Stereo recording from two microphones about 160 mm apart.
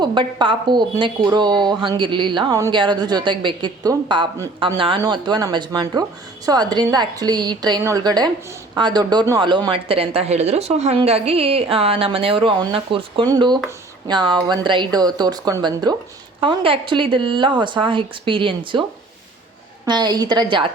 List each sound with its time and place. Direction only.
0.0 s a woman's voice: 30° right (ahead or behind)